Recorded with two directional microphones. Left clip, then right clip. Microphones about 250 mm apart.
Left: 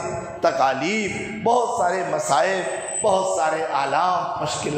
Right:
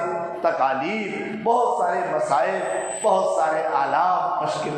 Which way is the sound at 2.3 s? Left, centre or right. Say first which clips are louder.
Left 1 dB; left.